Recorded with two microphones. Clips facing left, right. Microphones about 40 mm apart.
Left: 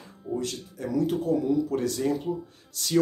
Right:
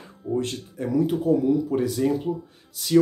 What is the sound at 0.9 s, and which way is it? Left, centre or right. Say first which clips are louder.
Speech: right 4 dB; centre.